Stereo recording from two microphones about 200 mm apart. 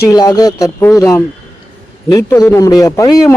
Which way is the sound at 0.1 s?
20° left (ahead or behind).